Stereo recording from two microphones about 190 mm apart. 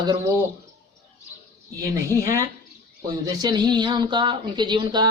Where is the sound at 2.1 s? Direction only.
15° right (ahead or behind).